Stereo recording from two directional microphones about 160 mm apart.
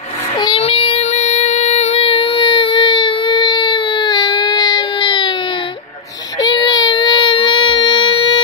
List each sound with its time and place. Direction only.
0.4 s child singing: 35° left (ahead or behind)
6.4 s baby cry: 30° left (ahead or behind)